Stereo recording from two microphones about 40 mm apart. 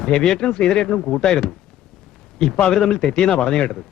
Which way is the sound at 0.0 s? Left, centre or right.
Centre.